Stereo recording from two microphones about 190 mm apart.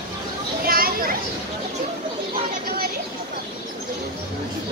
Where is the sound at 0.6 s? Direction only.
50° right (ahead or behind).